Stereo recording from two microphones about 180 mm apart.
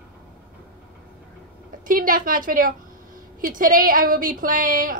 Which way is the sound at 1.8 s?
50° right (ahead or behind).